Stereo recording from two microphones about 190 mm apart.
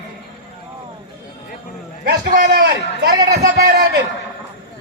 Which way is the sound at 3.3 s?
55° right (ahead or behind).